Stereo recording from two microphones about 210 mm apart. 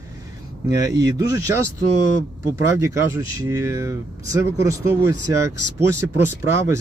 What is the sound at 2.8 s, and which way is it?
Speech, 15° right (ahead or behind).